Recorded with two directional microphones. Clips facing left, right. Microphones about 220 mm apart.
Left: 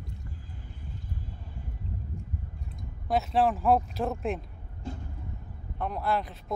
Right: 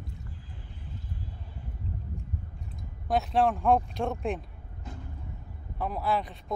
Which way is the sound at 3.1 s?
Centre (ahead or behind).